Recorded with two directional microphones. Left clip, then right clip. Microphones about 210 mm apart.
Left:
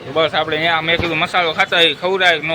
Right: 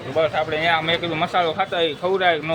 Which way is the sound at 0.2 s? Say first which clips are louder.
Left 4 dB; 20° left (ahead or behind).